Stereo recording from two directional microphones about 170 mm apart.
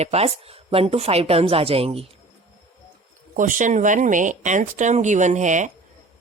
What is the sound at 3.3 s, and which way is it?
Speech, 50° right (ahead or behind).